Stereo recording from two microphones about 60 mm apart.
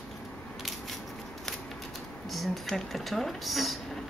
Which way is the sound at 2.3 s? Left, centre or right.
Centre.